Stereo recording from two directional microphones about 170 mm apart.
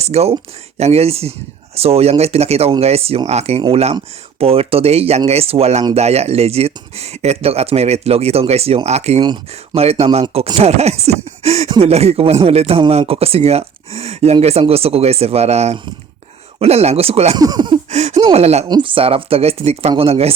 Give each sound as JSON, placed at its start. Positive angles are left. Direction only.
{"t": 0.0, "sound": "speech", "side_deg": -40}
{"t": 17.3, "sound": "speech", "side_deg": -25}
{"t": 17.9, "sound": "a sound", "side_deg": -40}
{"t": 18.3, "sound": "speech", "side_deg": -40}